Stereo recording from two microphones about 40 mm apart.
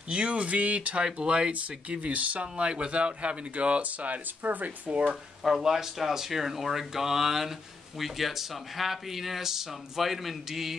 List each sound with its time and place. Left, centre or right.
0.1 s speech: right
1.0 s speech: right
1.5 s speech: right
4.4 s speech: right
4.8 s speech: right
5.6 s speech: centre